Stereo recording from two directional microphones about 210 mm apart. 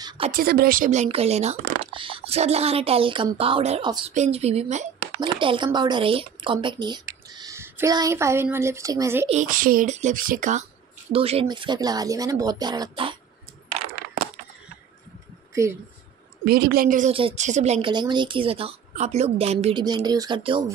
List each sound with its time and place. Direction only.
0.3 s a woman's voice: 45° right (ahead or behind); by 9.3 s 15° right (ahead or behind)
9.3 s speech: 40° right (ahead or behind)
11.1 s a woman's voice: 25° right (ahead or behind)
16.4 s a woman's voice: 45° right (ahead or behind)
17.1 s a woman's voice: 25° right (ahead or behind)
19.8 s a woman's voice: 20° right (ahead or behind)